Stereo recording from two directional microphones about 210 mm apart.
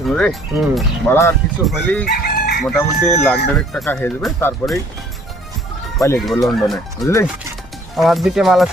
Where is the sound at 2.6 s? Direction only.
5° left (ahead or behind).